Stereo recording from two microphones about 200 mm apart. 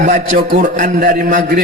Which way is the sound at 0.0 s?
40° right (ahead or behind).